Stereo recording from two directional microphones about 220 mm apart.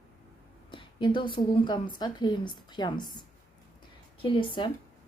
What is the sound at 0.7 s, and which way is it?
Speech, 20° left (ahead or behind).